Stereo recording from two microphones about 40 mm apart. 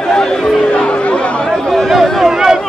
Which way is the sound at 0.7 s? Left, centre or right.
Left.